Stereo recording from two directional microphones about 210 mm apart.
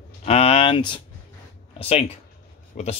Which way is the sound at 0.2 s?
30° left (ahead or behind).